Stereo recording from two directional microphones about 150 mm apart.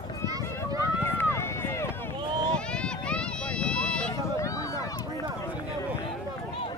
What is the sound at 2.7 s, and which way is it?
Run, 5° left (ahead or behind).